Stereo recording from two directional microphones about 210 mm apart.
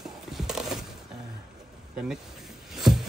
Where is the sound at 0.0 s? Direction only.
Centre (ahead or behind).